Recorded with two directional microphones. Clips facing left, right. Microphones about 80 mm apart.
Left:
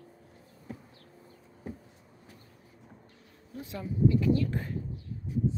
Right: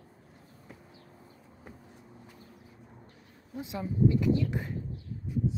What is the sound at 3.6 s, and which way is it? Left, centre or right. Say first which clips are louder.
Speech: right 2 dB; centre.